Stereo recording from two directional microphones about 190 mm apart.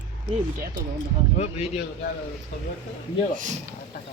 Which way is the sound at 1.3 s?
35° left (ahead or behind).